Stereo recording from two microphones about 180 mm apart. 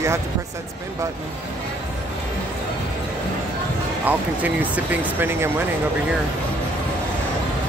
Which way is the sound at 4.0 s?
10° right (ahead or behind).